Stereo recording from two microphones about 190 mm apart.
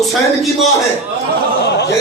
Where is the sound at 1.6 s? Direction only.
65° left (ahead or behind).